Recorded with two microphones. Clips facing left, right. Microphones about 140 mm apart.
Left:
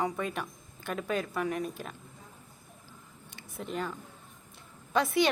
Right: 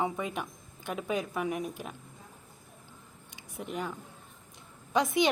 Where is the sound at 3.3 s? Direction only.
15° right (ahead or behind).